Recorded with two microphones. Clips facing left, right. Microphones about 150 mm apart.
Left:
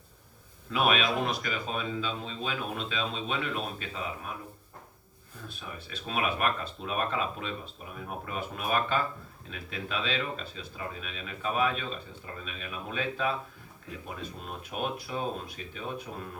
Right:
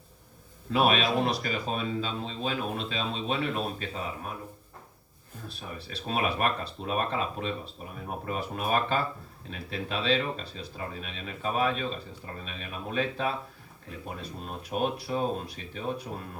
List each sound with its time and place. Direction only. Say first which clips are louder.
0.7 s speech: right 2 dB; 35° right (ahead or behind)
5.5 s speech: right 2 dB; 35° right (ahead or behind)